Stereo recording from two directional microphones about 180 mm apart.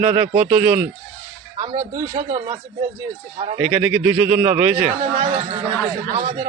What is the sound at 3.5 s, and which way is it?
A man's voice, 10° right (ahead or behind).